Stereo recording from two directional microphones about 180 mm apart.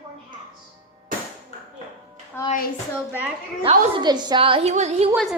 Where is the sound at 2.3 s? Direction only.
15° left (ahead or behind).